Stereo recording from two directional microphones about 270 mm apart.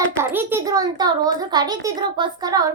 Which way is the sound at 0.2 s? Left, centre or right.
Centre.